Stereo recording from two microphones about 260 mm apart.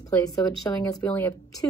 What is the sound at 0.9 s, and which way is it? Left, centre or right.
Speech, centre.